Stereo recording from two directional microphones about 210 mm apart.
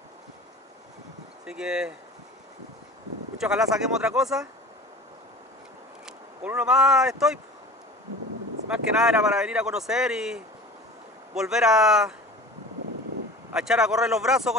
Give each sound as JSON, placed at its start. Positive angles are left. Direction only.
{"t": 1.4, "sound": "speech", "side_deg": -5}
{"t": 3.3, "sound": "speech", "side_deg": -5}
{"t": 6.0, "sound": "speech", "side_deg": -5}
{"t": 8.6, "sound": "speech", "side_deg": -5}
{"t": 13.5, "sound": "speech", "side_deg": -5}